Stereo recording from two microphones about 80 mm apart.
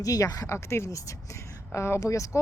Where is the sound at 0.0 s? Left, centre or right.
Left.